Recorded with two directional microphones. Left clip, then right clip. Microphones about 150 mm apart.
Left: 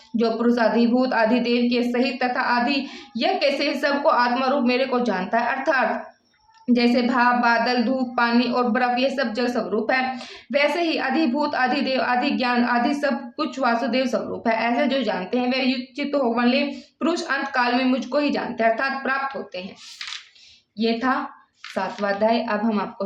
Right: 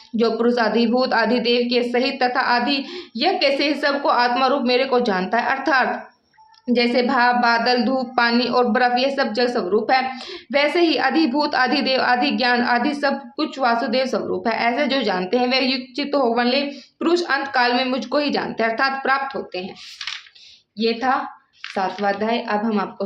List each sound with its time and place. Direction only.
0.2 s a woman's voice: 25° right (ahead or behind)
20.7 s a woman's voice: 15° right (ahead or behind)